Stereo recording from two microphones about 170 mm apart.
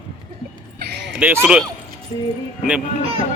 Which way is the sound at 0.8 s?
75° right (ahead or behind).